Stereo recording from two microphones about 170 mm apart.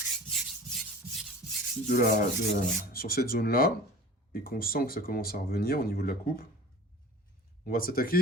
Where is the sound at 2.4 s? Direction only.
65° left (ahead or behind).